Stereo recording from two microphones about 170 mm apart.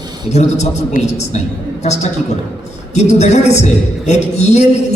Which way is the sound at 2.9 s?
40° left (ahead or behind).